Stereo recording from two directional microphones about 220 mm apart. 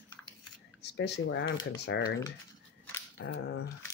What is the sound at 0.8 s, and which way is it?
Speech, 50° left (ahead or behind).